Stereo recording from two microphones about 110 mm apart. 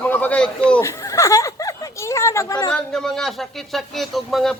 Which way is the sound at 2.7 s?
5° left (ahead or behind).